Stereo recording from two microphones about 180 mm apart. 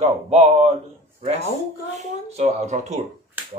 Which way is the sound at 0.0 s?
35° right (ahead or behind).